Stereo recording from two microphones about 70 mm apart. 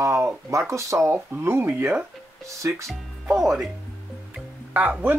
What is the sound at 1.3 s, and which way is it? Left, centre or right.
Speech, right.